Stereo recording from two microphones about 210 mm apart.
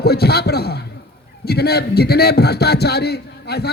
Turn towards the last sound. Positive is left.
turn(degrees=50)  # may be behind; listen again after turning